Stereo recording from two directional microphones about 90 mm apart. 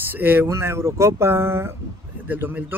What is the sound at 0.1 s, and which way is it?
Speech, 20° right (ahead or behind).